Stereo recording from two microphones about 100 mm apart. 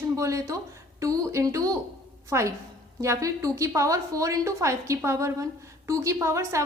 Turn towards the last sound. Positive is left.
turn(degrees=-30)  # may be behind; listen again after turning